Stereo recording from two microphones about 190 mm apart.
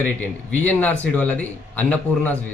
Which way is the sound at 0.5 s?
10° left (ahead or behind).